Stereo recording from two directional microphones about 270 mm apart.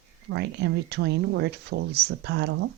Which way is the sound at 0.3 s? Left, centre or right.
Right.